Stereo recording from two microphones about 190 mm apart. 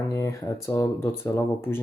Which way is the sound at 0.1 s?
15° left (ahead or behind).